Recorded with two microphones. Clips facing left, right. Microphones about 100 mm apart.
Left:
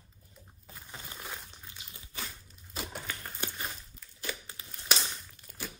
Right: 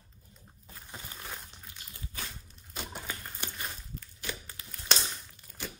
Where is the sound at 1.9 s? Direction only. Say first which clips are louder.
Right 6 dB; 20° left (ahead or behind).